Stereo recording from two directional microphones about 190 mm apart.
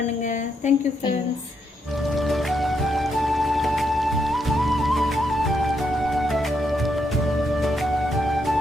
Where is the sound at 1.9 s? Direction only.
Centre (ahead or behind).